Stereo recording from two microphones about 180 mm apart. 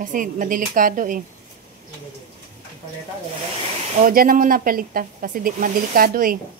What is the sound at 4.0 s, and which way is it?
Speech, 55° right (ahead or behind).